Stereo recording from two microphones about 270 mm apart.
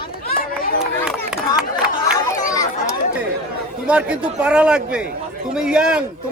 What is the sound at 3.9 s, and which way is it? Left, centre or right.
A man's voice, centre.